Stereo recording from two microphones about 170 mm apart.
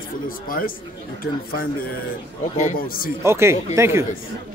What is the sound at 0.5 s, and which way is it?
Speech, 55° left (ahead or behind).